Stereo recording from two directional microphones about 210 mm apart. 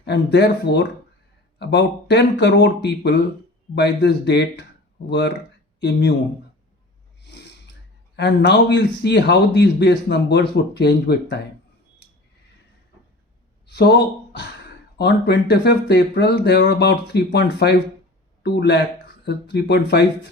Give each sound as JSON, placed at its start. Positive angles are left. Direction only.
{"t": 0.0, "sound": "speech", "side_deg": 55}
{"t": 7.3, "sound": "snort", "side_deg": 55}
{"t": 8.1, "sound": "speech", "side_deg": 55}
{"t": 13.7, "sound": "speech", "side_deg": 55}